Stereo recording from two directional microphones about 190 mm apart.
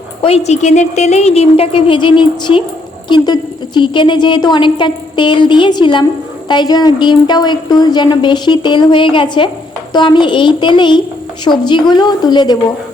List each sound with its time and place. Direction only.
0.2 s a woman's voice: 30° left (ahead or behind)